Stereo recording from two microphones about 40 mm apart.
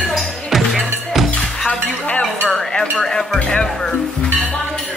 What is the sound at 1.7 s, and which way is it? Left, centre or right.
Music, left.